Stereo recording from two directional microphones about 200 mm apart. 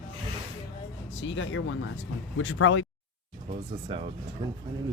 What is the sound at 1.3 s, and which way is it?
Speech, 75° left (ahead or behind).